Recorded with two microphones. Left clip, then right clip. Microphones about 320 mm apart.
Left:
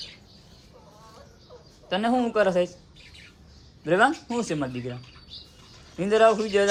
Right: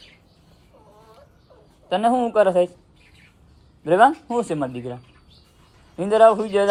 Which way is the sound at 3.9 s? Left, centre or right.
Centre.